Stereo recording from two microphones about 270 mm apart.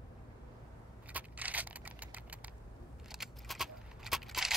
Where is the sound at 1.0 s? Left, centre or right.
Centre.